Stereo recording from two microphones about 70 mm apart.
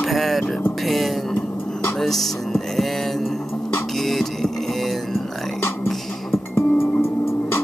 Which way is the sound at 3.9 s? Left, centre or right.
Centre.